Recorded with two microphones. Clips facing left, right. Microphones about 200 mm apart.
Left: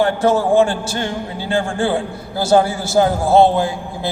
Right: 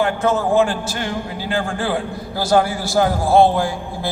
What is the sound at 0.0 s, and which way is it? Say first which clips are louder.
A man's voice: left 3 dB; 30° left (ahead or behind).